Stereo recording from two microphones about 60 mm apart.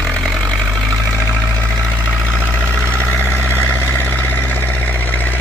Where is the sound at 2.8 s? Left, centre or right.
Right.